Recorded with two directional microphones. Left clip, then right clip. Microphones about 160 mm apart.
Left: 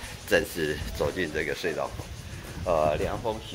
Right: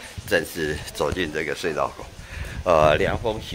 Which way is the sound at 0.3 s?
10° right (ahead or behind).